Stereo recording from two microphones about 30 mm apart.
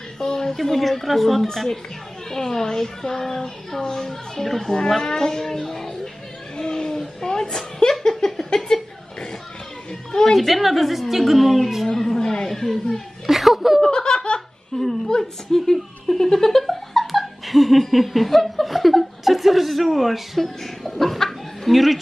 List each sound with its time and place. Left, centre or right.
0.2 s a sound: centre
0.6 s a woman's voice: centre
2.3 s a woman's voice: centre
6.5 s speech: left
8.0 s a sound: centre
10.3 s a woman's voice: centre
11.9 s speech: centre
13.3 s speech: centre
13.8 s laughter: left
14.7 s speech: left
15.5 s laughter: centre